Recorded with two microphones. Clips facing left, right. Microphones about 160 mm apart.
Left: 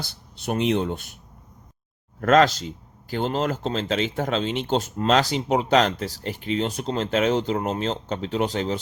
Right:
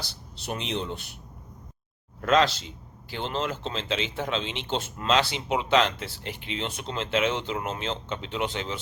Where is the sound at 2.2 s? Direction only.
50° left (ahead or behind).